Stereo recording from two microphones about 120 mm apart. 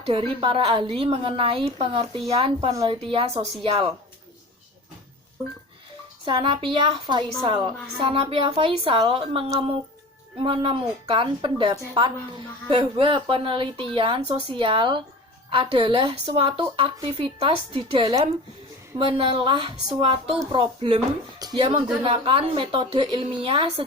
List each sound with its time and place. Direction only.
0.0 s a woman's voice: 50° right (ahead or behind)
6.2 s a woman's voice: 45° right (ahead or behind)
21.3 s speech: 35° right (ahead or behind)
22.0 s a woman's voice: 50° right (ahead or behind)